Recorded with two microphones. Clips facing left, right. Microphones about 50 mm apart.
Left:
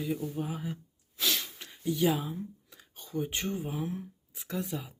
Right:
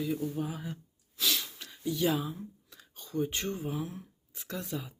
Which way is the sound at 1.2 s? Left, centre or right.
Left.